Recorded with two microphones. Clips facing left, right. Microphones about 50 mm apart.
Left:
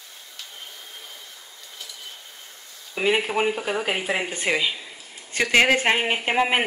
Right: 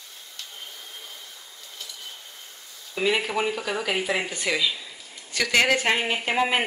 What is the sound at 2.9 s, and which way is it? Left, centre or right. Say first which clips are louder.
Speech: left 2 dB; left.